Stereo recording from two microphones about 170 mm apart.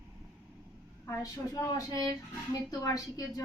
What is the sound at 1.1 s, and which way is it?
A woman's voice, 20° left (ahead or behind).